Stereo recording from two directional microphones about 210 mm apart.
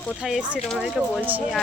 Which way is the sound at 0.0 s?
Centre (ahead or behind).